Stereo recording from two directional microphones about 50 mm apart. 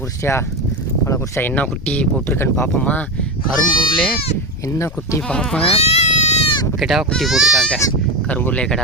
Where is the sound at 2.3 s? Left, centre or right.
Left.